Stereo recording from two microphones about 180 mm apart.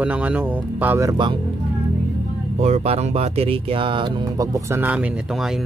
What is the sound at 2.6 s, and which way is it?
Speech, 35° right (ahead or behind).